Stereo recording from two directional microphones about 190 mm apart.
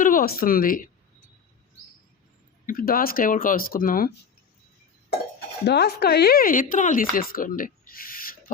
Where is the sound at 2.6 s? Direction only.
50° left (ahead or behind).